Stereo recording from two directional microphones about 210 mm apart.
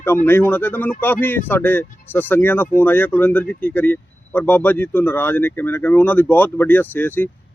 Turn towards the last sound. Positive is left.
turn(degrees=10)  # may be behind; listen again after turning